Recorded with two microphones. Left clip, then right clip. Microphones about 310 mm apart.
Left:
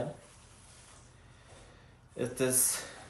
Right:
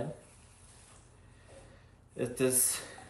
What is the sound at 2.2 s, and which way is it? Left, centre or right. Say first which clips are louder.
Speech: even; centre.